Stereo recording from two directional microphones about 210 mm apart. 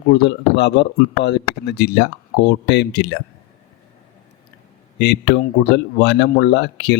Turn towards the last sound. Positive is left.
turn(degrees=55)  # may be behind; listen again after turning